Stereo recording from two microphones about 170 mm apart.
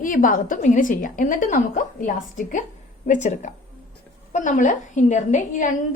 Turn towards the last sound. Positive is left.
turn(degrees=50)  # may be behind; listen again after turning